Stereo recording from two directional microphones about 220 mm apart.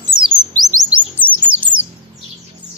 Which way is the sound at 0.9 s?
5° right (ahead or behind).